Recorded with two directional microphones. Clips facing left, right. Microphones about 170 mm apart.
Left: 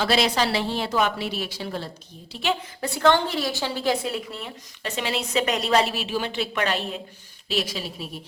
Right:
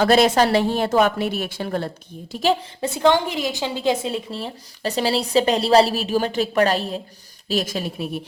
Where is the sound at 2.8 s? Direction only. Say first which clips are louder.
Right 2 dB; 20° right (ahead or behind).